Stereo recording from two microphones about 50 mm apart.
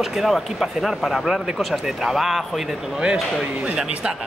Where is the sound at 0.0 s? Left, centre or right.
Centre.